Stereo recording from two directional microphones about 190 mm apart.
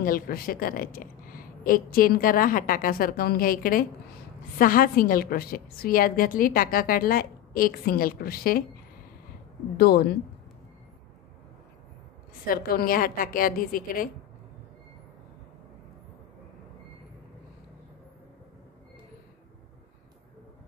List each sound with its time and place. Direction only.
0.0 s a woman's voice: 50° left (ahead or behind)
9.8 s a woman's voice: 55° left (ahead or behind)
12.4 s a woman's voice: 50° left (ahead or behind)